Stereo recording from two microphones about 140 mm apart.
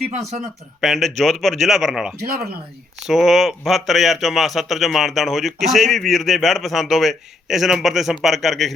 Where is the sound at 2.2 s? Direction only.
90° right.